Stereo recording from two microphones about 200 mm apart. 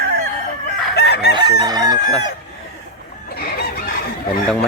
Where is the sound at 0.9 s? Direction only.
55° left (ahead or behind).